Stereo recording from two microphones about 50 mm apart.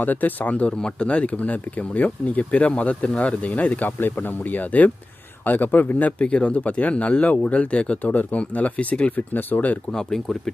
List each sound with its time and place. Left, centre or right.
0.0 s speech: left